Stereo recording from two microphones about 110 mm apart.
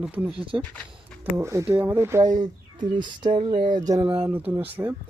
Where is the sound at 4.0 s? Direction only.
20° right (ahead or behind).